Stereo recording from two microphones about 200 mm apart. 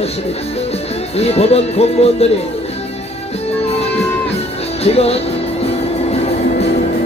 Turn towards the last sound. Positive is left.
turn(degrees=30)  # may be behind; listen again after turning